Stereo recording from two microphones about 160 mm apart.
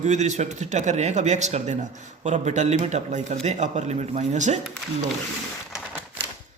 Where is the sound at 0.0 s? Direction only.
45° right (ahead or behind).